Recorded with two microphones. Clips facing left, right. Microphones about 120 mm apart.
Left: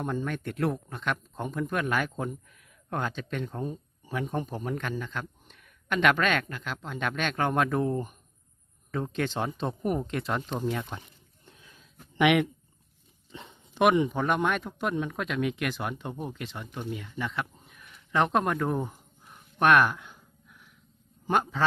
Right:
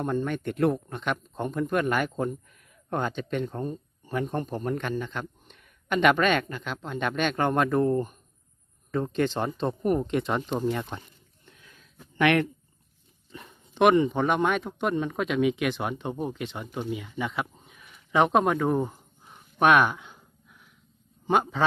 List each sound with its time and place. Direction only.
0.0 s a man's voice: centre (ahead or behind)
8.9 s speech: centre (ahead or behind)
11.4 s wheeze: 25° left (ahead or behind)
12.2 s a man's voice: 15° left (ahead or behind)
13.3 s a sound: 25° left (ahead or behind)
14.1 s speech: centre (ahead or behind)
19.3 s a sound: centre (ahead or behind)
21.2 s speech: centre (ahead or behind)